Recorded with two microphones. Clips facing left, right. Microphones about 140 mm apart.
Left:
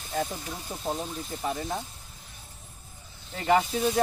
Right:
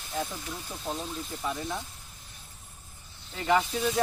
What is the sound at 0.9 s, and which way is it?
Speech, 25° left (ahead or behind).